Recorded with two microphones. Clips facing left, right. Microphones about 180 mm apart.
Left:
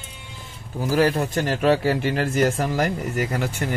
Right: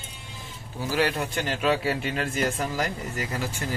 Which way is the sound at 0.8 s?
40° left (ahead or behind).